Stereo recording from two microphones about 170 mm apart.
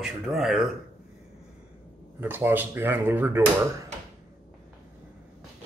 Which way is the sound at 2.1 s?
10° right (ahead or behind).